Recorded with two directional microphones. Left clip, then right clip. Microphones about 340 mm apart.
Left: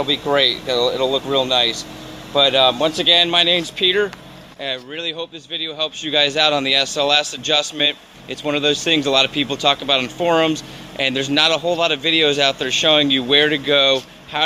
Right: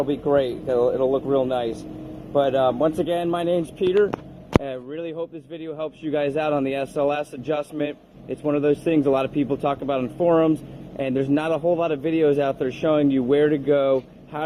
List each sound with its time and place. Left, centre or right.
0.0 s speech: left